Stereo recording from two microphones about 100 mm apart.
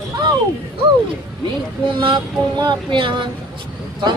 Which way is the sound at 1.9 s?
60° right (ahead or behind).